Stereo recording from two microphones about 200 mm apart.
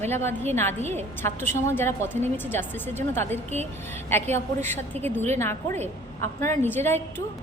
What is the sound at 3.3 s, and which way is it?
Speech, 35° right (ahead or behind).